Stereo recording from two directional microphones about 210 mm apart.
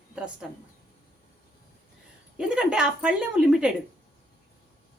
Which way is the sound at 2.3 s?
5° right (ahead or behind).